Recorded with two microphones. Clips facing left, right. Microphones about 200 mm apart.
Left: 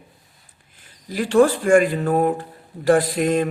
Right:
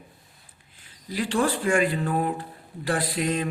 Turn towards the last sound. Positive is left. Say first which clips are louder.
# left 8 dB
turn(degrees=50)  # may be behind; listen again after turning